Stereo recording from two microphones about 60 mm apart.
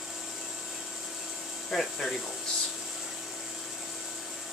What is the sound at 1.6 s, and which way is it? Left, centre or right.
Speech, centre.